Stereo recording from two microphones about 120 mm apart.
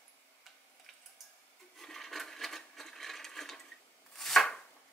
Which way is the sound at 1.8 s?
5° left (ahead or behind).